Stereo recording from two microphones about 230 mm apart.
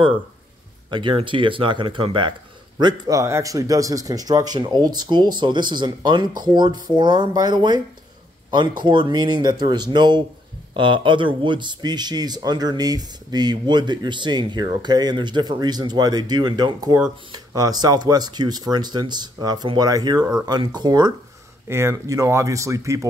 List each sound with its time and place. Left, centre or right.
0.8 s speech: right